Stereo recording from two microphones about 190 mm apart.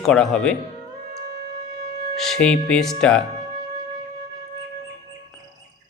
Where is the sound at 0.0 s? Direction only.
5° left (ahead or behind).